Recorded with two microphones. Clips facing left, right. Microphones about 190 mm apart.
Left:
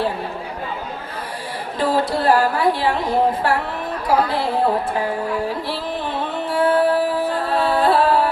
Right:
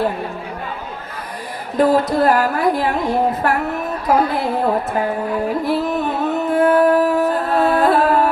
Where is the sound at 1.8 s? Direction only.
45° right (ahead or behind).